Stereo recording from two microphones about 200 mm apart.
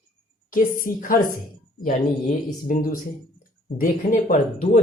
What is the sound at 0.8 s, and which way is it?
Speech, 45° left (ahead or behind).